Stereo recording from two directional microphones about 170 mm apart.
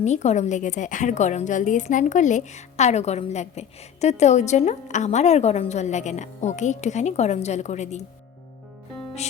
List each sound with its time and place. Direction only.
0.0 s a woman's voice: 45° left (ahead or behind)